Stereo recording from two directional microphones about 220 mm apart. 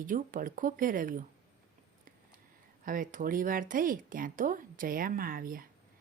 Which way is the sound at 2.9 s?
40° right (ahead or behind).